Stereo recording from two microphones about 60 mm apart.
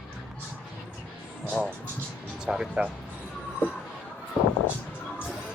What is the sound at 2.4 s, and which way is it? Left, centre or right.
Speech, centre.